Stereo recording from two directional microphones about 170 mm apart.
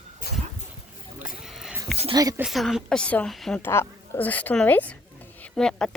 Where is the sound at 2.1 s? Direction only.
20° right (ahead or behind).